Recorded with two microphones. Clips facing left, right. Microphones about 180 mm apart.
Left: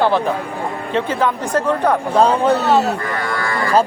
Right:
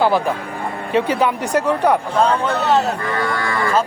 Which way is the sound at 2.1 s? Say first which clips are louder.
Left 3 dB; 35° left (ahead or behind).